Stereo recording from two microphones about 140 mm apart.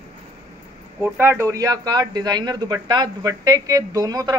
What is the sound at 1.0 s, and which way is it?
Speech, 15° right (ahead or behind).